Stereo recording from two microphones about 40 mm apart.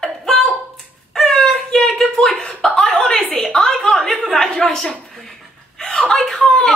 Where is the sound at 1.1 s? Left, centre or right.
Centre.